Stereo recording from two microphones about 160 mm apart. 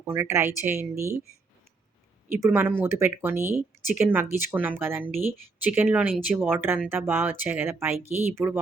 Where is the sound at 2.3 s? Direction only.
15° right (ahead or behind).